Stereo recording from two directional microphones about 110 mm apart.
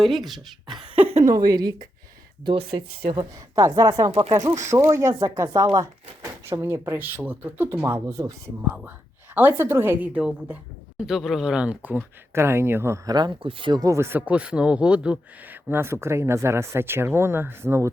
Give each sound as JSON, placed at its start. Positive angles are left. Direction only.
{"t": 0.0, "sound": "speech", "side_deg": 0}
{"t": 1.2, "sound": "speech", "side_deg": -35}
{"t": 2.4, "sound": "speech", "side_deg": -55}
{"t": 3.2, "sound": "speech", "side_deg": -30}
{"t": 8.2, "sound": "speech", "side_deg": -30}
{"t": 9.3, "sound": "a woman's voice", "side_deg": -20}
{"t": 13.1, "sound": "speech", "side_deg": -40}
{"t": 13.7, "sound": "speech", "side_deg": -30}
{"t": 14.2, "sound": "speech", "side_deg": -10}